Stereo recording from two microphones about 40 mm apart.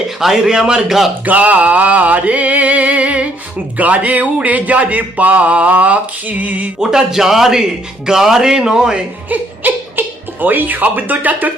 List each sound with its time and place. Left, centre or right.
0.2 s a man's voice: centre
1.2 s a sound: right
6.7 s a man's voice: centre
9.3 s music: right
10.4 s speech: right